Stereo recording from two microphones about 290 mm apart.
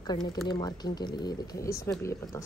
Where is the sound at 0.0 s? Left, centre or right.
Centre.